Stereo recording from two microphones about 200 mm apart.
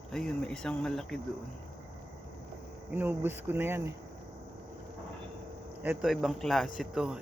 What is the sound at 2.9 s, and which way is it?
Speech, 10° right (ahead or behind).